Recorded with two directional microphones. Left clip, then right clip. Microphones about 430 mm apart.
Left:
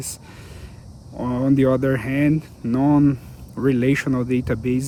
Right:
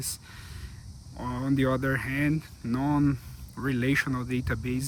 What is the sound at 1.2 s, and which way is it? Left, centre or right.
Speech, centre.